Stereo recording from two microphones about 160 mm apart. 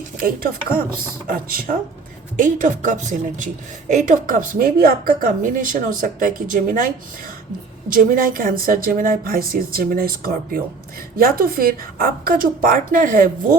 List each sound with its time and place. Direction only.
0.2 s a woman's voice: 60° right (ahead or behind)
2.3 s a woman's voice: 55° right (ahead or behind)